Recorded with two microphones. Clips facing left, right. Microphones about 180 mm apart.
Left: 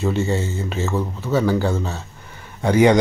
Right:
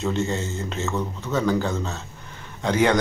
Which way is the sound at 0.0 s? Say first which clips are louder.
Left 4 dB; 10° left (ahead or behind).